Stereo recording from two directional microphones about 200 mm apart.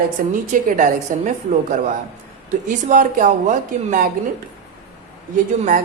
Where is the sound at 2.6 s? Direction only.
40° right (ahead or behind).